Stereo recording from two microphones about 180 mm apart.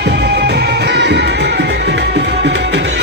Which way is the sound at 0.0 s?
70° right (ahead or behind).